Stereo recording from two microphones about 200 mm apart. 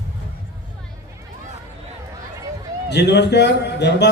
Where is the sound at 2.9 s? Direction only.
60° left (ahead or behind).